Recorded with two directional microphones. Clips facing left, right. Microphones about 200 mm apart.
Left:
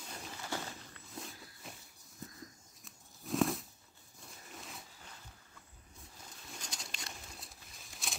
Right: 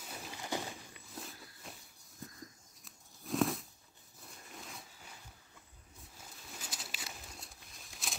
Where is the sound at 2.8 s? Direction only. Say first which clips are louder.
Left 1 dB; centre (ahead or behind).